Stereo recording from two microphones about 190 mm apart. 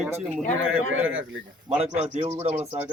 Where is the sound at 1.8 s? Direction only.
35° right (ahead or behind).